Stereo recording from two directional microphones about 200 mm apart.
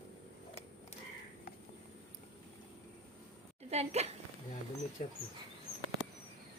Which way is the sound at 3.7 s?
30° right (ahead or behind).